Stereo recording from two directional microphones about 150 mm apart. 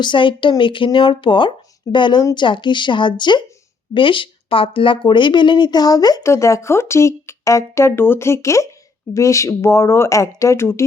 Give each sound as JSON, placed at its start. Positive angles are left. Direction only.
{"t": 0.0, "sound": "speech", "side_deg": 35}